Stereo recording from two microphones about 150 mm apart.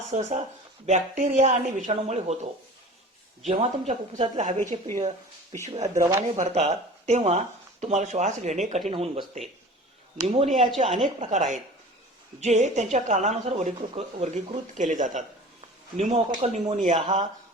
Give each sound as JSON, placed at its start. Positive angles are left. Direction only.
{"t": 0.1, "sound": "speech", "side_deg": -50}
{"t": 3.4, "sound": "speech", "side_deg": -50}
{"t": 6.0, "sound": "speech", "side_deg": -15}
{"t": 6.3, "sound": "speech", "side_deg": -50}
{"t": 8.9, "sound": "speech", "side_deg": -35}
{"t": 10.2, "sound": "speech", "side_deg": -45}
{"t": 10.5, "sound": "a woman's voice", "side_deg": 0}
{"t": 11.2, "sound": "speech", "side_deg": -50}